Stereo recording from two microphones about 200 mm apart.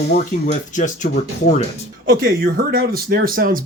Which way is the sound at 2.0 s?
45° right (ahead or behind).